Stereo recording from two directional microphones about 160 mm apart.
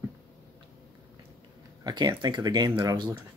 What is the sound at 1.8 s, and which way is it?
Speech, 25° right (ahead or behind).